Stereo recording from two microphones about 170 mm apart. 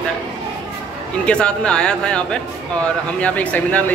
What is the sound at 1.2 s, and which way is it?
Speech, 5° left (ahead or behind).